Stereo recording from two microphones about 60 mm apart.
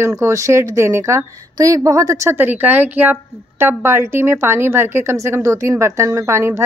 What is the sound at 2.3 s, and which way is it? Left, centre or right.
A woman's voice, right.